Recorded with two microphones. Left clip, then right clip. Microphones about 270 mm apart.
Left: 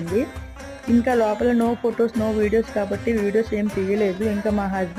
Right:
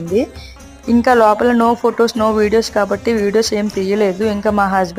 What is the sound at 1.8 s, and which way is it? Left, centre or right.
A woman's voice, centre.